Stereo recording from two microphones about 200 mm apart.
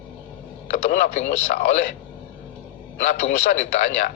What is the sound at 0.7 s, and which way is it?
A man's voice, 40° left (ahead or behind).